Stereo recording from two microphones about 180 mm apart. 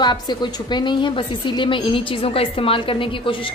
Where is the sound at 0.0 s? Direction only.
25° left (ahead or behind).